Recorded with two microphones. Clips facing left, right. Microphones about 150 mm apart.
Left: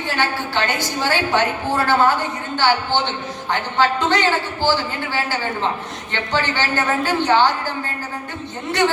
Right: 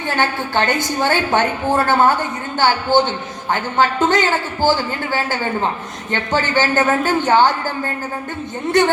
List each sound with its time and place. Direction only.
0.2 s a man's voice: 50° right (ahead or behind)